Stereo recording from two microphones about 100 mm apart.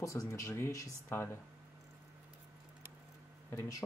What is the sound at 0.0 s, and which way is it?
Speech, 30° left (ahead or behind).